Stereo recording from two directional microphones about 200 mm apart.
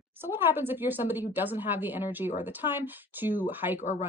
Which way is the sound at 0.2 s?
10° right (ahead or behind).